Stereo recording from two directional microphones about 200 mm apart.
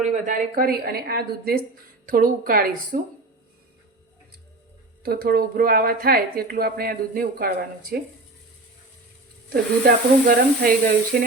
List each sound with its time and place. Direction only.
0.0 s a woman's voice: 40° right (ahead or behind)
5.0 s a woman's voice: 50° right (ahead or behind)
9.5 s a woman's voice: 50° right (ahead or behind)